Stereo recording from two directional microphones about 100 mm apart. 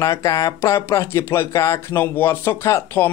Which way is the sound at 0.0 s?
35° left (ahead or behind).